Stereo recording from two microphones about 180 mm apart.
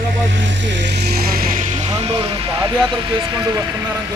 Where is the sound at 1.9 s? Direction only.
30° right (ahead or behind).